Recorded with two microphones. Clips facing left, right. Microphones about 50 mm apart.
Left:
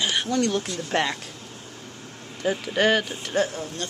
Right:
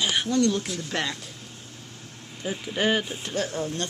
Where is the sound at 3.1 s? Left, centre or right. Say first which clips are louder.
Left 1 dB; centre.